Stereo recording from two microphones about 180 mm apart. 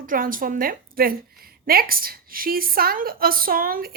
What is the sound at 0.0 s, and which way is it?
A woman's voice, 50° right (ahead or behind).